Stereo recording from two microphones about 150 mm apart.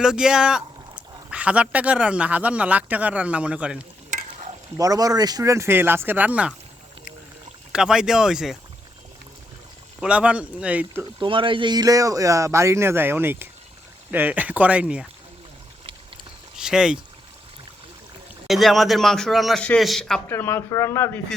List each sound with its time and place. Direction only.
0.0 s speech: 5° right (ahead or behind)
4.8 s speech: 25° right (ahead or behind)
7.7 s a man's voice: 5° right (ahead or behind)
10.0 s speech: 10° right (ahead or behind)
11.2 s speech: 35° right (ahead or behind); by 15.0 s 10° right (ahead or behind)
16.6 s a man's voice: 5° right (ahead or behind)
18.4 s a man's voice: centre (ahead or behind)
20.2 s speech: 15° left (ahead or behind)